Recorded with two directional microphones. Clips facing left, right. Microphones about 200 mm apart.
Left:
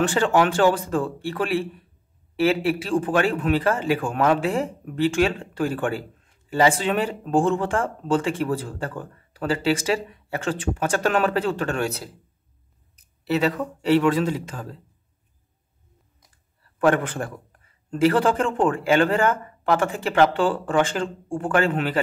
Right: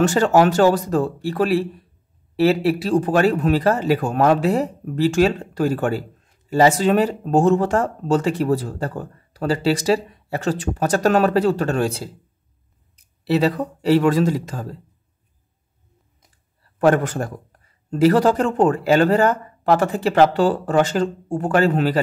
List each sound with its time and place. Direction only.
0.0 s a man's voice: 40° right (ahead or behind)
13.2 s a man's voice: 35° right (ahead or behind)
16.7 s a man's voice: 40° right (ahead or behind)